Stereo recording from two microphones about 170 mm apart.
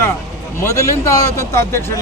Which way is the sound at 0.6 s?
15° left (ahead or behind).